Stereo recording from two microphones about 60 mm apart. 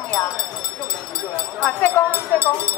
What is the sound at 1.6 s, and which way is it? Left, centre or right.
Music, left.